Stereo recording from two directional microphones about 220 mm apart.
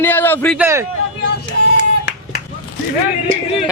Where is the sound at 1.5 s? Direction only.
55° left (ahead or behind).